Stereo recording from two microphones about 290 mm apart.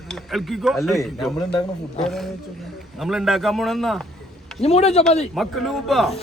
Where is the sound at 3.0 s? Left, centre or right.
Centre.